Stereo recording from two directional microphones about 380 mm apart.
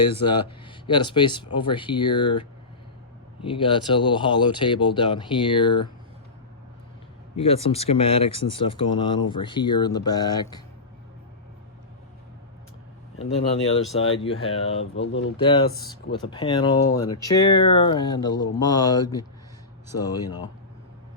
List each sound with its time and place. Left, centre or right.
0.1 s speech: centre
7.3 s speech: centre
14.1 s speech: centre
14.9 s speech: left
15.4 s speech: centre